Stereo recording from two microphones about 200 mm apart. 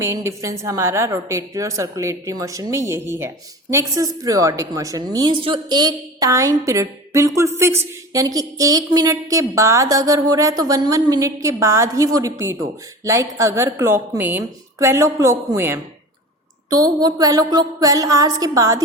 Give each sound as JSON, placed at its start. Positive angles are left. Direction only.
{"t": 0.0, "sound": "a woman's voice", "side_deg": -15}